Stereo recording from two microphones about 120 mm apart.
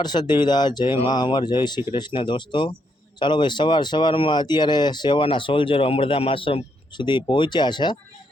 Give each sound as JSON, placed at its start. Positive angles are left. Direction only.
{"t": 0.0, "sound": "speech", "side_deg": 40}